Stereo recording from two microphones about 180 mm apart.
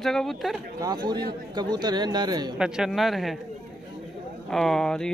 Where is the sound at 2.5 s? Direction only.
5° right (ahead or behind).